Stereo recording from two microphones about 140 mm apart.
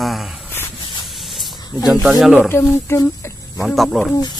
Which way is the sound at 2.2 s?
Centre (ahead or behind).